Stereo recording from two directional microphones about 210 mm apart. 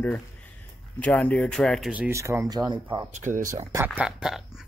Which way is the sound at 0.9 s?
5° left (ahead or behind).